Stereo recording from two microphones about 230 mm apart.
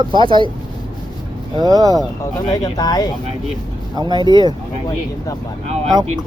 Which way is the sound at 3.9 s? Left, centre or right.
Centre.